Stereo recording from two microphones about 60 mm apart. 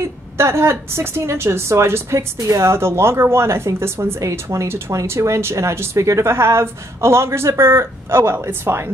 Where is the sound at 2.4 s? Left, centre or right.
Right.